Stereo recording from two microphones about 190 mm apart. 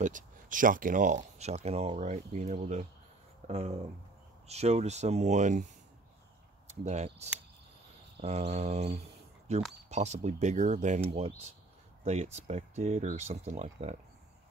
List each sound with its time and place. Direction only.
0.0 s speech: 45° right (ahead or behind)
6.7 s speech: 35° right (ahead or behind)